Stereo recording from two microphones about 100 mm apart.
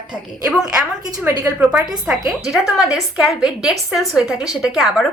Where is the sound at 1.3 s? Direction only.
25° right (ahead or behind).